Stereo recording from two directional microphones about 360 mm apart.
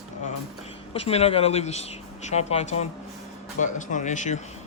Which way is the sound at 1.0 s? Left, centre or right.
Centre.